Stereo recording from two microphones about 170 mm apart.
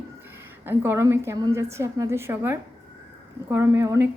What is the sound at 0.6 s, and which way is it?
A woman's voice, 15° right (ahead or behind).